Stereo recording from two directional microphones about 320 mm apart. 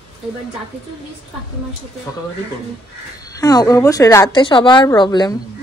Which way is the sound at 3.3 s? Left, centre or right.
Centre.